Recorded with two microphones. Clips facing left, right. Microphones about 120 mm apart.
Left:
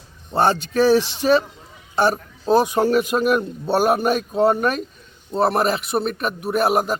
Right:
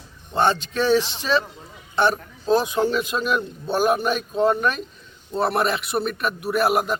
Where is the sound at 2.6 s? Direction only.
50° left (ahead or behind).